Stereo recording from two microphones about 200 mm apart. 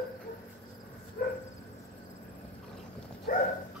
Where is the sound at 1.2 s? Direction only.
50° left (ahead or behind).